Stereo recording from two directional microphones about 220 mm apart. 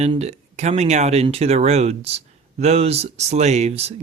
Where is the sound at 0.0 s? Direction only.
30° right (ahead or behind).